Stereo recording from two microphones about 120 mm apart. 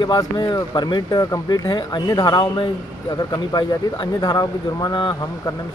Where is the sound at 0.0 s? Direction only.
35° left (ahead or behind).